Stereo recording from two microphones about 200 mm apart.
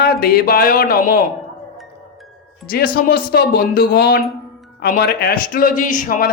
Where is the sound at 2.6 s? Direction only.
45° left (ahead or behind).